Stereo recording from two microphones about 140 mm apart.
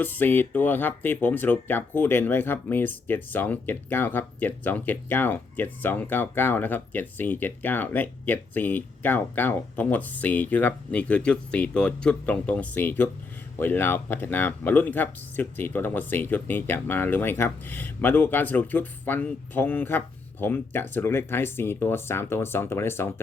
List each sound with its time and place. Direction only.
0.0 s speech: 15° left (ahead or behind)